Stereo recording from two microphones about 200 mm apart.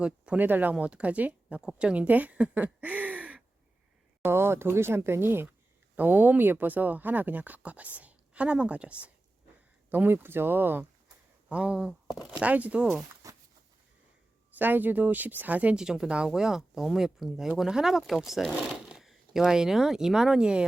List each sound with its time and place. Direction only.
0.0 s speech: 5° right (ahead or behind)
13.2 s a sound: 15° right (ahead or behind)
14.6 s speech: 10° right (ahead or behind)